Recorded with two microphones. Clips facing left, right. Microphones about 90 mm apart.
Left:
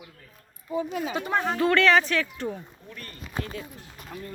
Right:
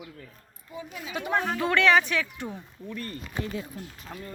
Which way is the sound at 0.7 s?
50° left (ahead or behind).